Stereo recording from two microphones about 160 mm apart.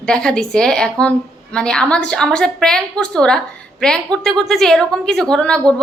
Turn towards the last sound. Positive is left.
turn(degrees=5)  # may be behind; listen again after turning